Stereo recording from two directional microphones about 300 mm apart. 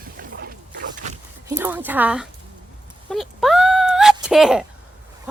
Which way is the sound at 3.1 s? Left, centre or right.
Centre.